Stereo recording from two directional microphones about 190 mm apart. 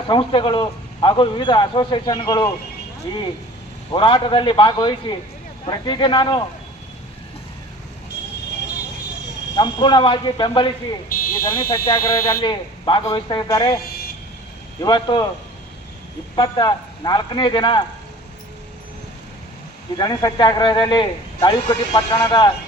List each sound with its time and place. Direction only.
0.1 s a man's voice: 25° left (ahead or behind)
3.9 s a man's voice: 25° left (ahead or behind)
9.6 s a man's voice: 25° left (ahead or behind)
11.1 s speech: 50° left (ahead or behind)
11.9 s a man's voice: 25° left (ahead or behind)
14.8 s a man's voice: 20° left (ahead or behind)
16.3 s a man's voice: 20° left (ahead or behind)
20.0 s a man's voice: 20° left (ahead or behind)